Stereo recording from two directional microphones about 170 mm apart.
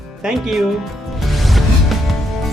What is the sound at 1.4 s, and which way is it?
Music, centre (ahead or behind).